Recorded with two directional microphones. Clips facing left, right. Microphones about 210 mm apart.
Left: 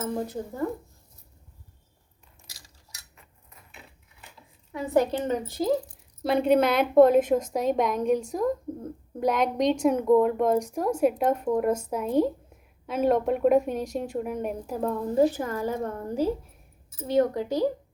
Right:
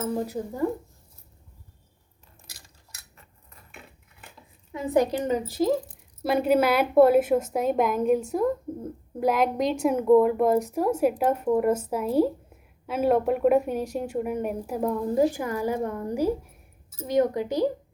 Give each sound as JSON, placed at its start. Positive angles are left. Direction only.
{"t": 0.0, "sound": "a woman's voice", "side_deg": -10}
{"t": 2.5, "sound": "a sound", "side_deg": -55}
{"t": 4.7, "sound": "a woman's voice", "side_deg": -15}